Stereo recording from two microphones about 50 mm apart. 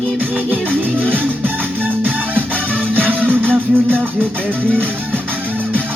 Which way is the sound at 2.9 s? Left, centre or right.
Right.